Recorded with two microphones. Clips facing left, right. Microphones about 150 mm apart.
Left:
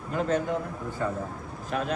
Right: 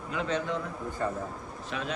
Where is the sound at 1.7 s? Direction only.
50° left (ahead or behind).